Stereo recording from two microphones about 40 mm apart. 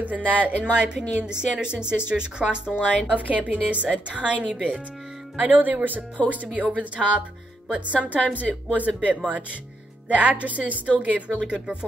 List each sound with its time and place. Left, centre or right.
0.0 s a woman's voice: right
0.7 s speech: right
3.1 s a woman's voice: right
4.5 s speech: centre
5.4 s a woman's voice: right